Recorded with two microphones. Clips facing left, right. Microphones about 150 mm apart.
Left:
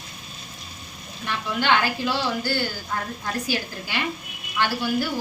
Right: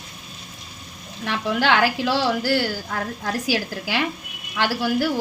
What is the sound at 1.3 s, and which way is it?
A woman's voice, 90° right.